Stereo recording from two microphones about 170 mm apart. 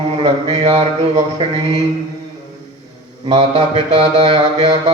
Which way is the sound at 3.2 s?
35° right (ahead or behind).